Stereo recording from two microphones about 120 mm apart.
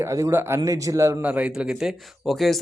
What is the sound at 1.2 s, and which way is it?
Speech, 10° right (ahead or behind).